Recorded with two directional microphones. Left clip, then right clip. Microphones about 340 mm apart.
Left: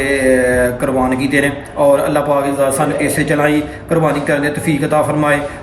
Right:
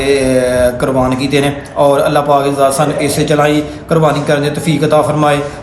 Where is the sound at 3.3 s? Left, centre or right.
Centre.